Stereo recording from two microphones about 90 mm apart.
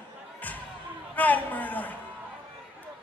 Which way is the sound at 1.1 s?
20° left (ahead or behind).